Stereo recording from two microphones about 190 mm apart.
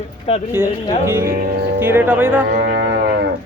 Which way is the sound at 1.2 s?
50° right (ahead or behind).